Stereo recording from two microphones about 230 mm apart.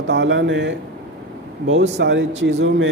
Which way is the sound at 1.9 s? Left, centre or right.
Right.